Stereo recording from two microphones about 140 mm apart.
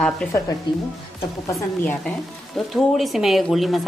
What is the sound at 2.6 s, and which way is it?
A woman's voice, 5° left (ahead or behind).